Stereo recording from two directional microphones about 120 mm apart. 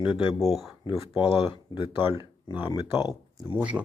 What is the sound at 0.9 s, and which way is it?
Speech, 45° left (ahead or behind).